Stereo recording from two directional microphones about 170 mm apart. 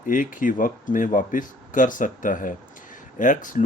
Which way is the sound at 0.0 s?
50° left (ahead or behind).